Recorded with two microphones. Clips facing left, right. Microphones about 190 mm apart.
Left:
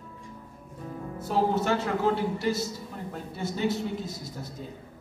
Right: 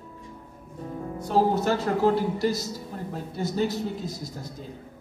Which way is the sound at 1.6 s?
40° right (ahead or behind).